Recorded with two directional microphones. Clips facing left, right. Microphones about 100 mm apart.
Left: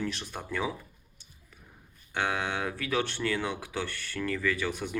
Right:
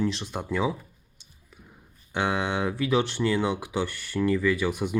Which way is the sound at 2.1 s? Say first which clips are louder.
Right 4 dB; 20° right (ahead or behind).